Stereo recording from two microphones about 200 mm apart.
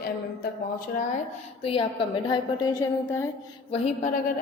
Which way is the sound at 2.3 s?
20° left (ahead or behind).